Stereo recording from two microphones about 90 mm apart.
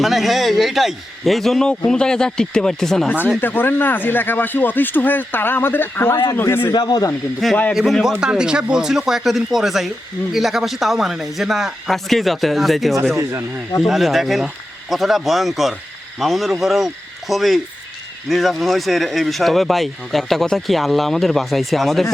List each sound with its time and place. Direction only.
0.0 s speech: centre (ahead or behind)
3.4 s a man's voice: 20° left (ahead or behind)
6.7 s speech: 50° left (ahead or behind)
7.7 s speech: centre (ahead or behind)